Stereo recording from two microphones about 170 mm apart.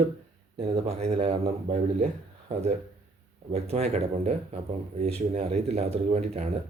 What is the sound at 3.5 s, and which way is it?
Speech, 35° right (ahead or behind).